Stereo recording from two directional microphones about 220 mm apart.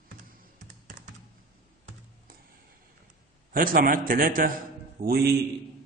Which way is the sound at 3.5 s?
40° right (ahead or behind).